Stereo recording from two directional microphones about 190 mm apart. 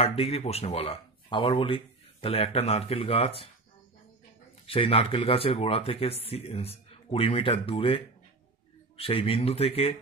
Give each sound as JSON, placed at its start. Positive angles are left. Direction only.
{"t": 0.0, "sound": "speech", "side_deg": 30}
{"t": 4.6, "sound": "speech", "side_deg": 30}